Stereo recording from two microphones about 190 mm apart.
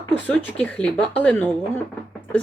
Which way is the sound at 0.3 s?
5° left (ahead or behind).